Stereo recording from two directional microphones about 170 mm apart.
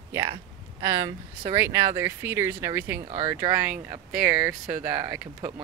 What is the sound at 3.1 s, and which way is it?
Speech, 35° right (ahead or behind).